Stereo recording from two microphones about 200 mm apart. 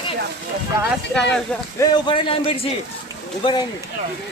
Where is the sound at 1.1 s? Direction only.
5° left (ahead or behind).